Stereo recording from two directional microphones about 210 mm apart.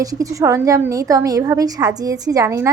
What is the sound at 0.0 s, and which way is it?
A woman's voice, 15° right (ahead or behind).